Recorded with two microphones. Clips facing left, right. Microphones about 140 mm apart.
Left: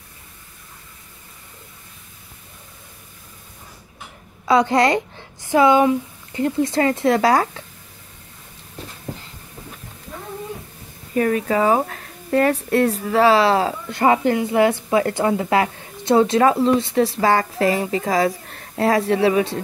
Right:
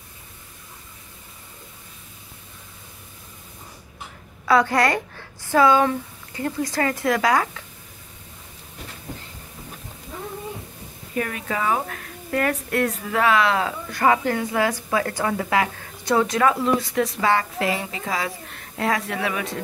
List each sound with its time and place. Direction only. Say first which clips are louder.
4.5 s a woman's voice: left 3 dB; 20° left (ahead or behind)
11.1 s a woman's voice: left 8 dB; 35° left (ahead or behind)